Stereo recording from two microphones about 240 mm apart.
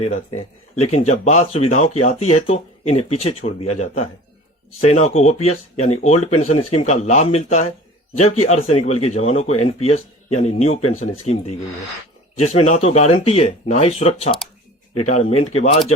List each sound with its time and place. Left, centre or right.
0.0 s speech: left